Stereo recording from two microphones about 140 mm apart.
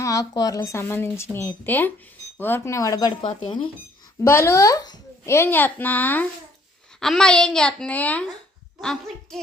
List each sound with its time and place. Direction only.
0.0 s speech: 25° left (ahead or behind)
4.2 s a child's voice: 20° left (ahead or behind); by 9.4 s 5° left (ahead or behind)